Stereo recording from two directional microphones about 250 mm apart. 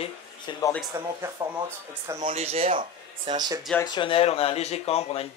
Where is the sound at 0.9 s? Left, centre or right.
Centre.